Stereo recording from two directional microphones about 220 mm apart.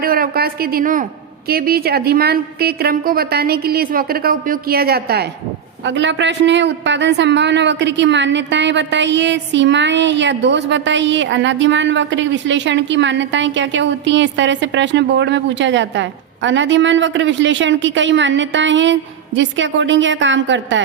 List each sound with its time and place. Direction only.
0.0 s a woman's voice: 40° right (ahead or behind)